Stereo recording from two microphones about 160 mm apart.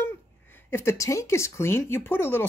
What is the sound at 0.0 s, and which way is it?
Speech, 15° left (ahead or behind).